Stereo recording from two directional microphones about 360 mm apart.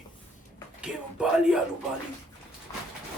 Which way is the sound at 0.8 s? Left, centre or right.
Centre.